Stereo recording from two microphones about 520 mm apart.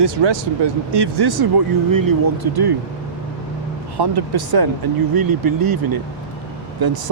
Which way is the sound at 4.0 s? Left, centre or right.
Right.